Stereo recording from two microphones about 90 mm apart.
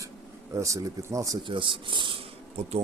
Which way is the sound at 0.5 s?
35° right (ahead or behind).